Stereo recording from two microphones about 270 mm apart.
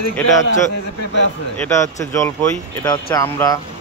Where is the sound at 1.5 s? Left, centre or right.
Centre.